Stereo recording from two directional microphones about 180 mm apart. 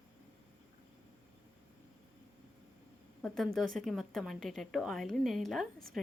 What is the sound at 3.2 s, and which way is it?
A woman's voice, centre (ahead or behind).